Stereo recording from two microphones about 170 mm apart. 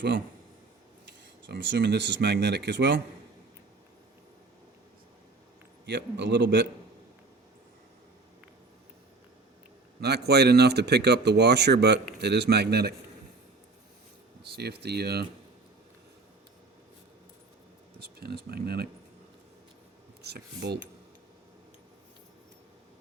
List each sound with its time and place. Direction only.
1.5 s speech: 90° right
5.8 s speech: 90° right
10.0 s speech: 75° right (ahead or behind)
14.5 s speech: 75° right (ahead or behind)
18.0 s speech: 70° right (ahead or behind)
20.2 s speech: 75° right (ahead or behind)